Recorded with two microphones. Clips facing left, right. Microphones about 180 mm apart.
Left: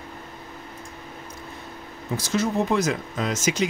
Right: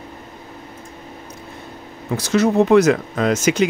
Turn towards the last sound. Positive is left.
turn(degrees=-65)  # may be behind; listen again after turning